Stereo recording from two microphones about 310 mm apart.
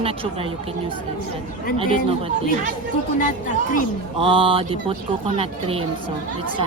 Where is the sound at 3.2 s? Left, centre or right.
Left.